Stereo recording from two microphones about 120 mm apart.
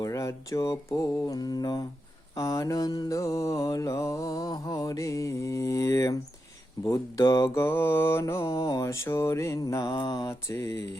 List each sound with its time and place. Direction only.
0.0 s mantra: 25° left (ahead or behind)
1.4 s mantra: 35° left (ahead or behind)
10.5 s mantra: 25° left (ahead or behind)